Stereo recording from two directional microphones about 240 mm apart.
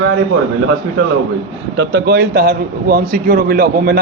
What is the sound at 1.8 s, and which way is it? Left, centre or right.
A man's voice, right.